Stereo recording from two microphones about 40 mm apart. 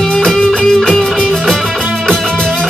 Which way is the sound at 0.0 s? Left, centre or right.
Centre.